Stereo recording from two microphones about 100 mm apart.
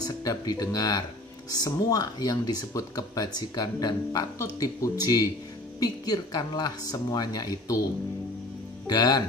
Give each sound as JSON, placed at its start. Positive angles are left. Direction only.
{"t": 0.0, "sound": "speech", "side_deg": 40}
{"t": 8.8, "sound": "speech", "side_deg": 45}